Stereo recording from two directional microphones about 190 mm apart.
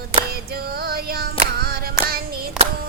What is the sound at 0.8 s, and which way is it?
Music, 55° right (ahead or behind).